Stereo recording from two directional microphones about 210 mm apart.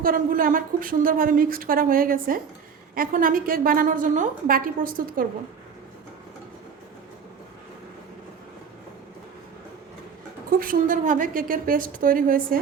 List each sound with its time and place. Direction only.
0.0 s speech: 40° right (ahead or behind)
10.6 s speech: 40° right (ahead or behind)